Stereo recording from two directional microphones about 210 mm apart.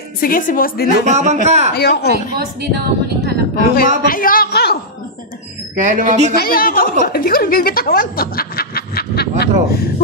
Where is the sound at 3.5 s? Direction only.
45° left (ahead or behind).